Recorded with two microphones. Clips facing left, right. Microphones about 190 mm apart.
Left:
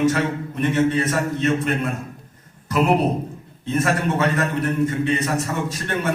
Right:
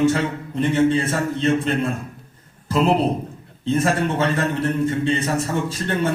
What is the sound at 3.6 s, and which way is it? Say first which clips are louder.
A man's voice: right 1 dB; 30° right (ahead or behind).